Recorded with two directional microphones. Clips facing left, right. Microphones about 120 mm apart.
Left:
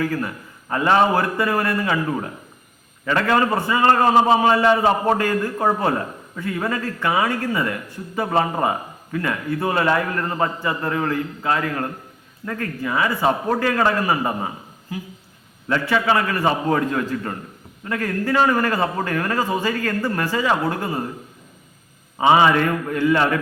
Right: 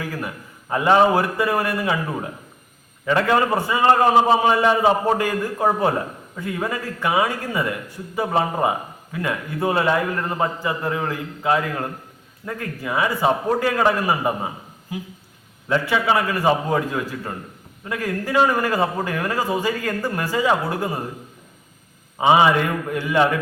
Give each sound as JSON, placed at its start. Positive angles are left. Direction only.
{"t": 0.0, "sound": "a man's voice", "side_deg": -15}
{"t": 3.1, "sound": "a man's voice", "side_deg": -20}
{"t": 15.7, "sound": "a man's voice", "side_deg": -15}
{"t": 22.2, "sound": "a man's voice", "side_deg": -15}